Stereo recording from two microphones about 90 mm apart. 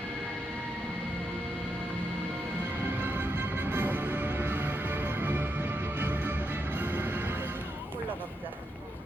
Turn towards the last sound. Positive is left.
turn(degrees=-20)  # may be behind; listen again after turning